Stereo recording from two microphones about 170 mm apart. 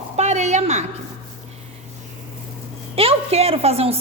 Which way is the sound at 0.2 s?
40° right (ahead or behind).